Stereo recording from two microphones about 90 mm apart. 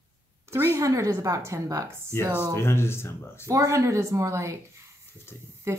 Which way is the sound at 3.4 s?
35° right (ahead or behind).